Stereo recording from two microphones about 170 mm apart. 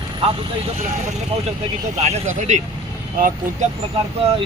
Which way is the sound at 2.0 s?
45° right (ahead or behind).